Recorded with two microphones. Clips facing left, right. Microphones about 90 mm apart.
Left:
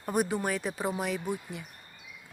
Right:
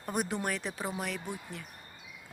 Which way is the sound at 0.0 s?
5° left (ahead or behind).